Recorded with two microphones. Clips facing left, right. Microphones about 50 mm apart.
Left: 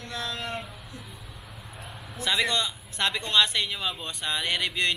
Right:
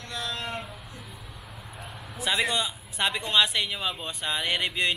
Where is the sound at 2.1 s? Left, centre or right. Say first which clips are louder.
Even; centre.